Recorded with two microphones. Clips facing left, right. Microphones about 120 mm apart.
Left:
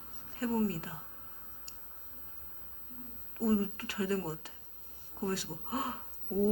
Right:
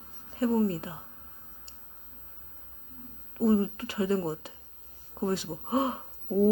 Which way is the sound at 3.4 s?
20° right (ahead or behind).